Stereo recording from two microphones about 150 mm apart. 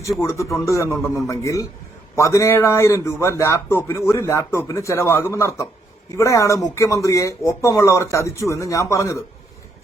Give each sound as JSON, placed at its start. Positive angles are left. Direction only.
{"t": 0.2, "sound": "speech", "side_deg": 20}